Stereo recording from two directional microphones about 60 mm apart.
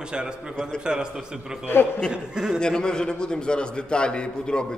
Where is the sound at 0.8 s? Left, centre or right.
Centre.